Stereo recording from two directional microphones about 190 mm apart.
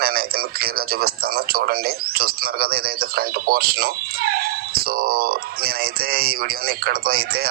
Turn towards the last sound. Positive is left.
turn(degrees=-55)  # may be behind; listen again after turning